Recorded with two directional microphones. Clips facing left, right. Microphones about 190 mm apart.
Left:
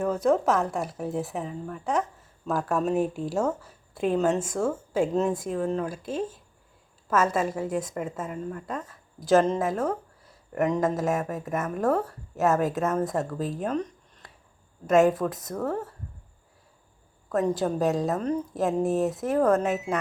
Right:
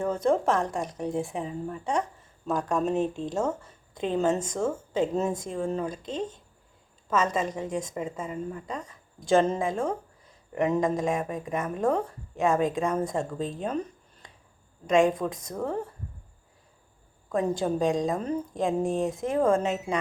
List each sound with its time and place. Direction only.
0.0 s a woman's voice: 5° left (ahead or behind)
17.3 s a woman's voice: centre (ahead or behind)
18.5 s a woman's voice: 5° left (ahead or behind)